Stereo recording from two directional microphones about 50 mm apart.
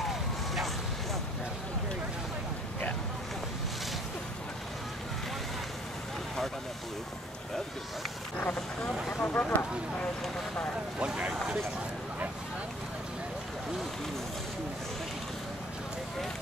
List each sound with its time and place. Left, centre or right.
9.2 s speech: left
11.0 s speech: right